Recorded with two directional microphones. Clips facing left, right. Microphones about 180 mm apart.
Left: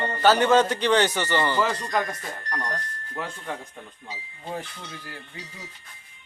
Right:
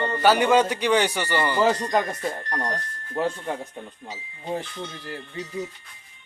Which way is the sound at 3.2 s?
25° right (ahead or behind).